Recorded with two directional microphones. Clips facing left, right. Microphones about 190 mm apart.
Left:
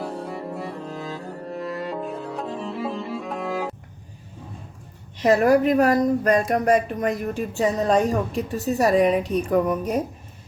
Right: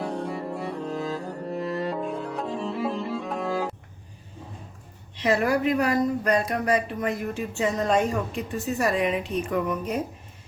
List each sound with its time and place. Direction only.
0.0 s music: centre (ahead or behind)
5.1 s speech: 40° left (ahead or behind)